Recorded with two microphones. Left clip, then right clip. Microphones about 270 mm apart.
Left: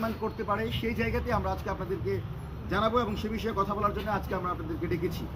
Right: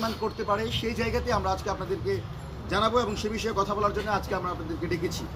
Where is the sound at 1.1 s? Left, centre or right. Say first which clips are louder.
Right 4 dB; right.